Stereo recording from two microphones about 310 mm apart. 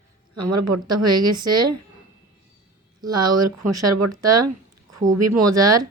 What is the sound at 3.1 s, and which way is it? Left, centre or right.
Speech, right.